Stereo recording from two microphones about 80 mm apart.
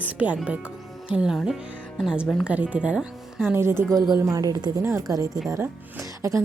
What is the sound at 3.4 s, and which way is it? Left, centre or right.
Speech, right.